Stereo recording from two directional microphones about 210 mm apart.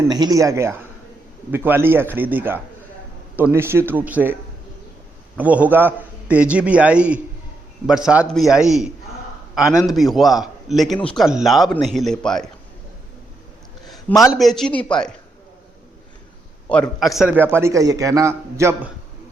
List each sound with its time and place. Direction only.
0.1 s a man's voice: 20° right (ahead or behind)
5.4 s a man's voice: 5° right (ahead or behind)
14.3 s a man's voice: centre (ahead or behind)
16.6 s a man's voice: 5° left (ahead or behind); by 18.9 s 10° right (ahead or behind)